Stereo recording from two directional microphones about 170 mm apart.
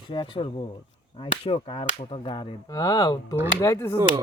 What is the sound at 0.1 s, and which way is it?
Chop, 30° left (ahead or behind).